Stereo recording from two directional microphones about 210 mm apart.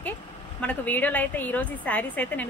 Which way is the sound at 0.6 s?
5° left (ahead or behind).